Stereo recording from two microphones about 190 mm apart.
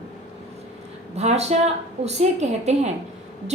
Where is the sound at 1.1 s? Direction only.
35° right (ahead or behind).